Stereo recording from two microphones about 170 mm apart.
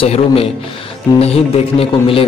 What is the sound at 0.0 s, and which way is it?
A man's voice, 35° left (ahead or behind).